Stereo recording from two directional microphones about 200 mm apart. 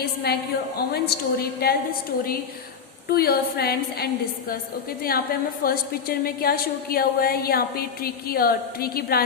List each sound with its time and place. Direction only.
0.0 s a woman's voice: 50° left (ahead or behind)
3.1 s a woman's voice: 50° left (ahead or behind)